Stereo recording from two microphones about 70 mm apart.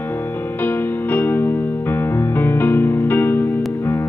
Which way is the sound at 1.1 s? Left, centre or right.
Left.